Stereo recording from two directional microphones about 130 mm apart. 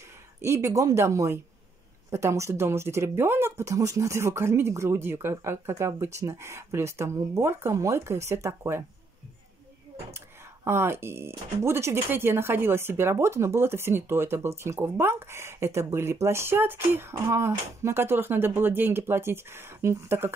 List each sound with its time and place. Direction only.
0.4 s speech: 20° right (ahead or behind)
10.1 s speech: 20° right (ahead or behind)